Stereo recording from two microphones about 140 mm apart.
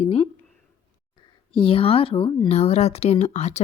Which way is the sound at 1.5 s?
40° left (ahead or behind).